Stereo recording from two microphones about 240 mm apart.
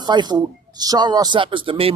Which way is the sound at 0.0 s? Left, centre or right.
Centre.